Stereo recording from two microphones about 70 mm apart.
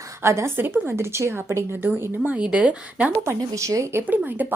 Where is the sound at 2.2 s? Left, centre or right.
Centre.